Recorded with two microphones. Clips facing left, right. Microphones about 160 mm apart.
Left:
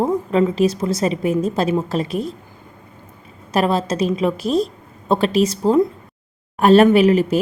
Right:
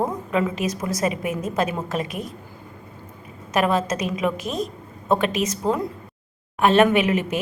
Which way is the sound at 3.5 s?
30° left (ahead or behind).